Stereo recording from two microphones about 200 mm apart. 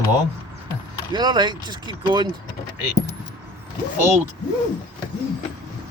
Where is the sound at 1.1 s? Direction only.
20° right (ahead or behind).